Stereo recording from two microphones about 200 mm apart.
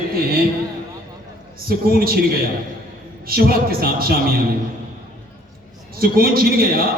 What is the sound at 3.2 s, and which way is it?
A man's voice, 50° right (ahead or behind).